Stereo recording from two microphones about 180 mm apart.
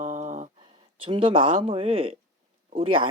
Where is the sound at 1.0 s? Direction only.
30° right (ahead or behind).